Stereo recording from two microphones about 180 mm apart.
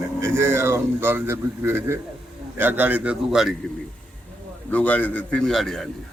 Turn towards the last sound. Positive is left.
turn(degrees=0)  # may be behind; listen again after turning